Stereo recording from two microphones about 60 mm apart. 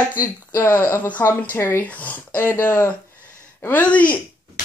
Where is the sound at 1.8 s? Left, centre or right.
Left.